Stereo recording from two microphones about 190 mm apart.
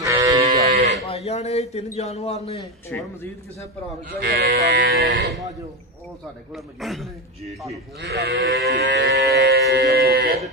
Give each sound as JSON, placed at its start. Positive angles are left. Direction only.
{"t": 0.0, "sound": "livestock", "side_deg": -15}
{"t": 0.4, "sound": "livestock", "side_deg": -30}
{"t": 1.0, "sound": "a man's voice", "side_deg": 35}
{"t": 2.9, "sound": "speech", "side_deg": 10}
{"t": 4.2, "sound": "sheep", "side_deg": -65}
{"t": 6.5, "sound": "a man's voice", "side_deg": 0}
{"t": 8.0, "sound": "sheep", "side_deg": -60}